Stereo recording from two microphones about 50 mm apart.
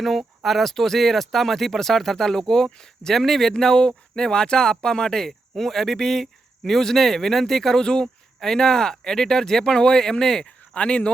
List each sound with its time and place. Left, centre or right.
0.0 s speech: centre; by 11.1 s left